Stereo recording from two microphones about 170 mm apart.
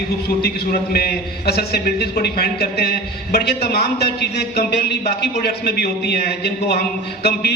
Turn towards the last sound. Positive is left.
turn(degrees=75)  # may be behind; listen again after turning